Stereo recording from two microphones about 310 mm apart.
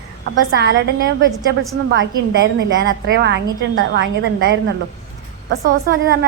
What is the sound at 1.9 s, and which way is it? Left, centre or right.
A woman's voice, right.